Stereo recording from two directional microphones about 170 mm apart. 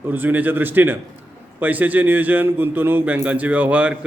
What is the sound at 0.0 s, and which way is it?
A man's voice, 10° right (ahead or behind).